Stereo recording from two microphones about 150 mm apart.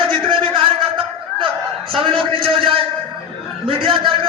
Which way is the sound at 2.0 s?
35° right (ahead or behind).